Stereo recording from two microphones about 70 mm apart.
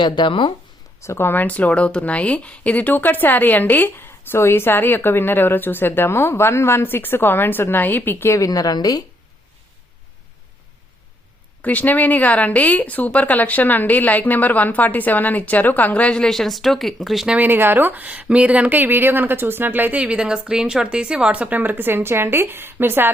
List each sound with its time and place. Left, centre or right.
0.9 s speech: left
8.4 s a woman's voice: left
11.6 s speech: left; by 17.2 s centre
17.2 s speech: right